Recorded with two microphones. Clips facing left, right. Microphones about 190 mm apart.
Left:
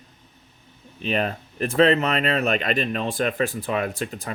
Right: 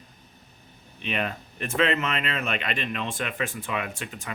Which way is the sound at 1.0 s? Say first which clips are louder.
Left 5 dB; 35° left (ahead or behind).